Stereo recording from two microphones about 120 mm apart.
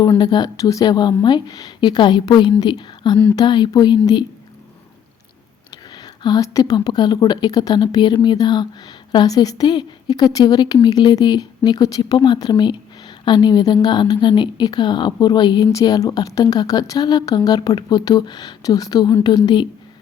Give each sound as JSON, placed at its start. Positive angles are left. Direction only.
{"t": 0.2, "sound": "speech", "side_deg": 35}
{"t": 5.7, "sound": "speech", "side_deg": 35}